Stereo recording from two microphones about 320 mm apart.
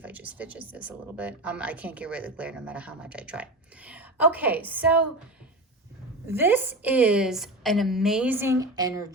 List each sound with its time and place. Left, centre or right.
0.0 s speech: centre
6.2 s speech: centre